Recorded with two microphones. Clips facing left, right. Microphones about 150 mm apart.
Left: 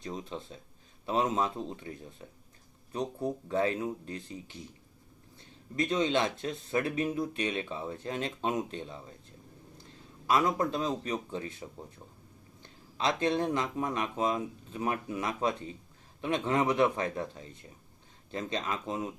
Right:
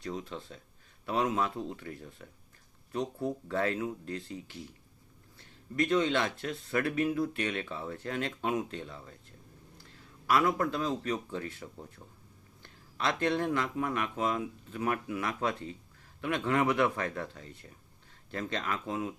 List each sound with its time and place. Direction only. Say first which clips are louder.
0.0 s speech: even; 20° left (ahead or behind)
10.2 s speech: even; 20° left (ahead or behind)